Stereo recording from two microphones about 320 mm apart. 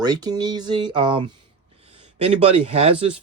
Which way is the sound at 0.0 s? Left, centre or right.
Centre.